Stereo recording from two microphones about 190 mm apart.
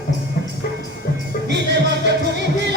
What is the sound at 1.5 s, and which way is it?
Music, 65° right (ahead or behind).